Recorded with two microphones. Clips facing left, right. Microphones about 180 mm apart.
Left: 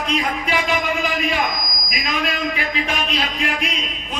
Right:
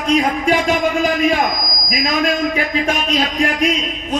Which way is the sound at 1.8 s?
45° right (ahead or behind).